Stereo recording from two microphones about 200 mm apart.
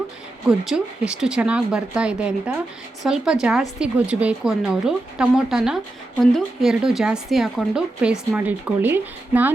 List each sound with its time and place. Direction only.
0.4 s speech: centre (ahead or behind)